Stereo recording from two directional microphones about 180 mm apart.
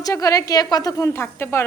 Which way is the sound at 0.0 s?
20° left (ahead or behind).